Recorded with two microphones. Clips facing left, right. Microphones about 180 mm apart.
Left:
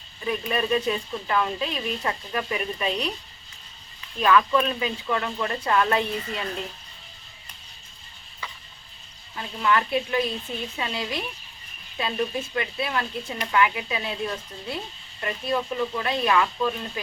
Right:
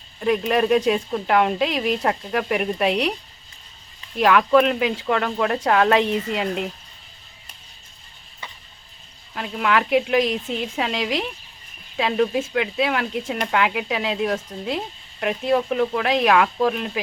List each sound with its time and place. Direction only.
0.2 s speech: 75° right (ahead or behind)
4.2 s speech: 75° right (ahead or behind)
9.3 s speech: 75° right (ahead or behind)
11.9 s speech: 75° right (ahead or behind)